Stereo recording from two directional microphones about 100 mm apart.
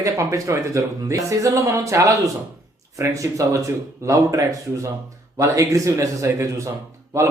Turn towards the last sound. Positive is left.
turn(degrees=-30)  # may be behind; listen again after turning